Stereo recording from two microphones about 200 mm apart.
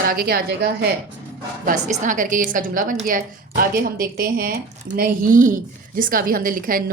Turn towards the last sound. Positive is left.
turn(degrees=-45)  # may be behind; listen again after turning